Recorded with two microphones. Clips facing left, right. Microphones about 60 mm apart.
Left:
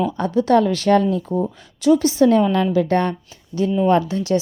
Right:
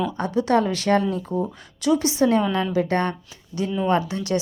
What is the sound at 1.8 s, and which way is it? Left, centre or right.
A woman's voice, right.